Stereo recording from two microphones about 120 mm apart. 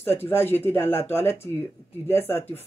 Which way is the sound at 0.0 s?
20° left (ahead or behind).